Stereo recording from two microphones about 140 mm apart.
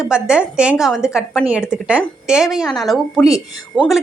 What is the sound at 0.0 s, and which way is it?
A woman's voice, 5° right (ahead or behind).